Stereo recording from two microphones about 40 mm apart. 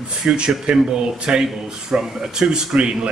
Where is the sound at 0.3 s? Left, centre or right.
Right.